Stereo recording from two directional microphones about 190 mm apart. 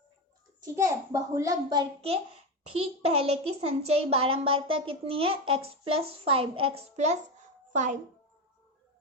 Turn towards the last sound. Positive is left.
turn(degrees=-40)  # may be behind; listen again after turning